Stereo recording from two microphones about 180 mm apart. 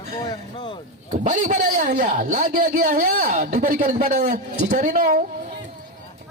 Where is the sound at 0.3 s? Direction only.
25° left (ahead or behind).